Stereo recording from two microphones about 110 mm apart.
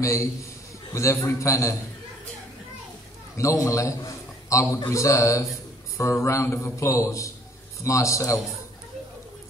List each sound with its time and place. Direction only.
0.0 s a man's voice: 25° left (ahead or behind)
3.3 s a man's voice: 30° left (ahead or behind)